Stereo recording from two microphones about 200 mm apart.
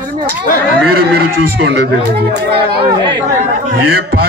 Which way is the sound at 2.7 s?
25° right (ahead or behind).